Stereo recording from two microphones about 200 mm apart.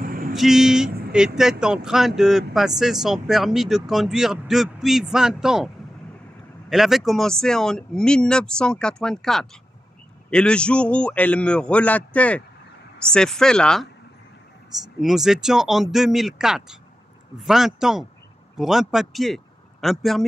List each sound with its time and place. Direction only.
0.0 s a sound: 45° right (ahead or behind)
0.3 s speech: centre (ahead or behind)
6.7 s speech: centre (ahead or behind)
15.0 s speech: centre (ahead or behind)